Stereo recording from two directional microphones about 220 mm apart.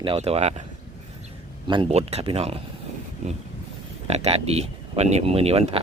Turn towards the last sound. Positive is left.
turn(degrees=-25)  # may be behind; listen again after turning